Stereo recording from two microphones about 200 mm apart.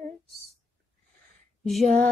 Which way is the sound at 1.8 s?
35° right (ahead or behind).